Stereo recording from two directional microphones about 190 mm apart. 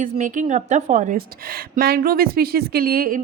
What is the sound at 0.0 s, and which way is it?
A woman's voice, 40° right (ahead or behind).